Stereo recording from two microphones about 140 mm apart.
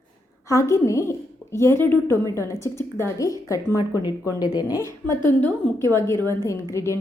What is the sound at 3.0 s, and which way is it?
Speech, 20° left (ahead or behind).